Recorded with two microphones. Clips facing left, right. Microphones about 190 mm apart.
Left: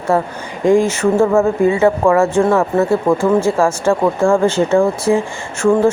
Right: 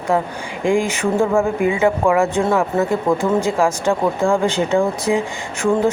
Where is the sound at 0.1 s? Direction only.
15° right (ahead or behind).